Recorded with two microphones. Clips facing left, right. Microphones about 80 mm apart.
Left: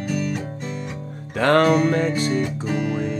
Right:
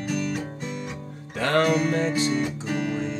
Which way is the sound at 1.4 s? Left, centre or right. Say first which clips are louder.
Left 5 dB; left.